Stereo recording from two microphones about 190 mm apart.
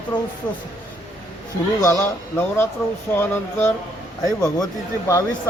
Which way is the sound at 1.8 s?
15° left (ahead or behind).